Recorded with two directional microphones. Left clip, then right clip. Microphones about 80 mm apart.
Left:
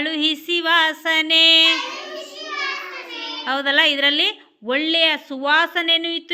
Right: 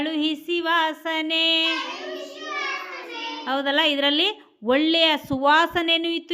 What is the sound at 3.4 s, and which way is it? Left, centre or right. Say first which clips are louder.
A woman's voice: left 4 dB; right.